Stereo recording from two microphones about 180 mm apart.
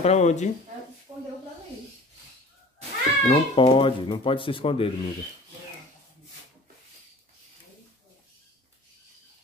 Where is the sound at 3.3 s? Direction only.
30° left (ahead or behind).